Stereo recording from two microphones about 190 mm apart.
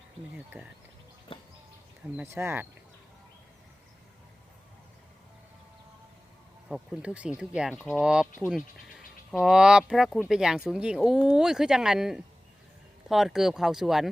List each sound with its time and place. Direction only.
0.5 s speech: 15° right (ahead or behind)
1.3 s music: 25° left (ahead or behind)
2.1 s speech: 15° right (ahead or behind)
6.7 s speech: 5° right (ahead or behind)